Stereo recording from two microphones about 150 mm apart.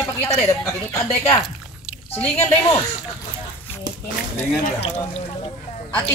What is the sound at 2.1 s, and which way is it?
Speech, 10° left (ahead or behind).